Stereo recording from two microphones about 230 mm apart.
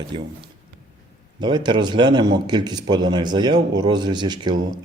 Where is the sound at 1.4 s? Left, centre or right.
Centre.